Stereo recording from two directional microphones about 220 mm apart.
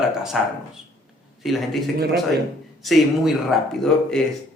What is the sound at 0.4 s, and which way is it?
A man's voice, centre (ahead or behind).